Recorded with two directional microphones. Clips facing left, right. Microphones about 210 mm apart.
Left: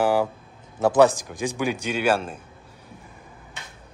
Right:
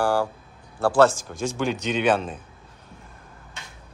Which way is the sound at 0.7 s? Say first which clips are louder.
Left 1 dB; 15° left (ahead or behind).